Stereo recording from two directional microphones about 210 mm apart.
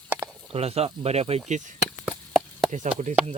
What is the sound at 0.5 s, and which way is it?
Speech, 30° right (ahead or behind).